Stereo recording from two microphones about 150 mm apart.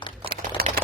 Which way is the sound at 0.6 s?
90° right.